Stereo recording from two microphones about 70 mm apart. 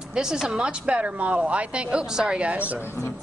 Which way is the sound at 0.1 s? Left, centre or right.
Centre.